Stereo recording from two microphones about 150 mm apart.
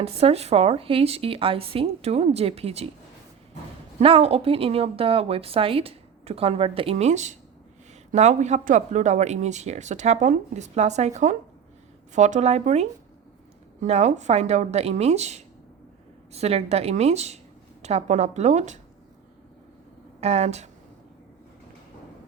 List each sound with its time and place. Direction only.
0.0 s a woman's voice: 45° right (ahead or behind)
4.0 s a woman's voice: 40° right (ahead or behind)
20.2 s speech: 45° right (ahead or behind)